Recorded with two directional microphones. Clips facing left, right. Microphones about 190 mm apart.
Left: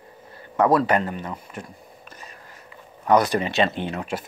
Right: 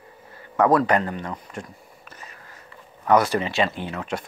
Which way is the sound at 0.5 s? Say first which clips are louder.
Even; 25° left (ahead or behind).